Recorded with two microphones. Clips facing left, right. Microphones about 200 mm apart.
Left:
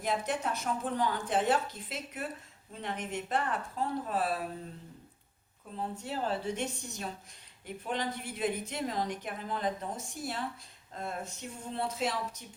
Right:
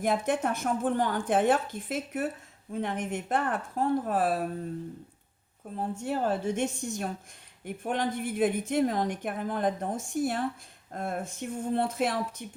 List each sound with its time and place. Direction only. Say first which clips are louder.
0.0 s a woman's voice: right 6 dB; 50° right (ahead or behind)
5.7 s a woman's voice: right 6 dB; 45° right (ahead or behind)